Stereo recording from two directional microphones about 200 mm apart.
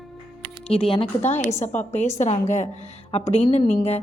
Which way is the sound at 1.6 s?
35° left (ahead or behind).